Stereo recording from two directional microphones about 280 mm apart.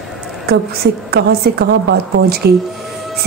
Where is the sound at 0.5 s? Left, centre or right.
Right.